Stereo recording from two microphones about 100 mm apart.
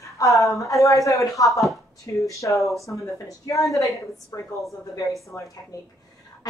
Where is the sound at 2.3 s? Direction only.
30° left (ahead or behind).